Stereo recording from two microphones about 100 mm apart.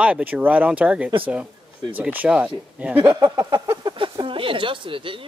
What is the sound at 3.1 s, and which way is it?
Speech, 45° right (ahead or behind).